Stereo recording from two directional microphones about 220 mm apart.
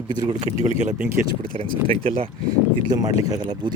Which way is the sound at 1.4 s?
25° right (ahead or behind).